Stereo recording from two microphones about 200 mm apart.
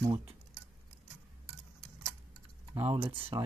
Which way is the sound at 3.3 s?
20° right (ahead or behind).